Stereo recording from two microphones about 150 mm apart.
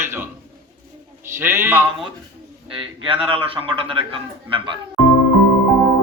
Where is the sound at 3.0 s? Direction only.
35° right (ahead or behind).